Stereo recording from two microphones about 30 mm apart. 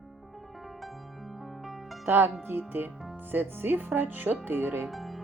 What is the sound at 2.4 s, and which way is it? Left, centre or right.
Speech, right.